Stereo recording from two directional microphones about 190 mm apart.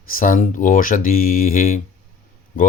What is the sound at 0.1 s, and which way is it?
Speech, 45° left (ahead or behind).